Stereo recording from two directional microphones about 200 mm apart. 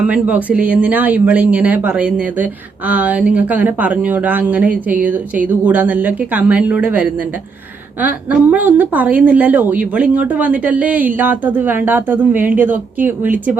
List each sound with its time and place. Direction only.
0.0 s speech: 5° right (ahead or behind)